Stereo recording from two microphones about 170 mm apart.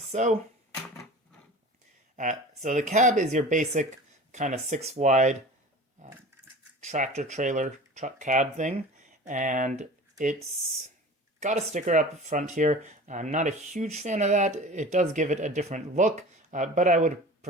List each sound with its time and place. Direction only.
0.1 s speech: 45° right (ahead or behind)
2.1 s speech: 45° right (ahead or behind)
6.0 s a sound: 45° right (ahead or behind)
6.8 s speech: 45° right (ahead or behind)
11.3 s speech: 45° right (ahead or behind)